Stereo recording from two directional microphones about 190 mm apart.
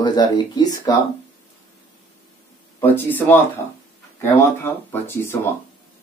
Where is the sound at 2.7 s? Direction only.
10° left (ahead or behind).